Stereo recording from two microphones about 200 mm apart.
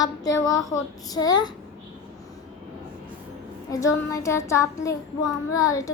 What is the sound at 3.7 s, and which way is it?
A woman's voice, 15° left (ahead or behind).